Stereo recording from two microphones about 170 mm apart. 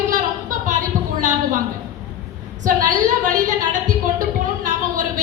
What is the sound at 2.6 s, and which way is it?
Speech, 50° right (ahead or behind).